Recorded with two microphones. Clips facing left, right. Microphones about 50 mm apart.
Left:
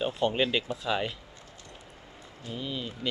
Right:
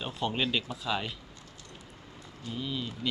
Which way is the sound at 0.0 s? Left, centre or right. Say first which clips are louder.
Left 5 dB; centre.